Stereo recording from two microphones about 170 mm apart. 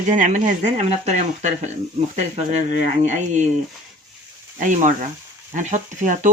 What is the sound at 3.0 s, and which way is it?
Speech, 45° right (ahead or behind).